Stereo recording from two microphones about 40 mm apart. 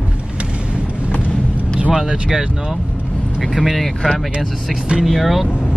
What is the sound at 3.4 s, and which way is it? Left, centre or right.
Speech, centre.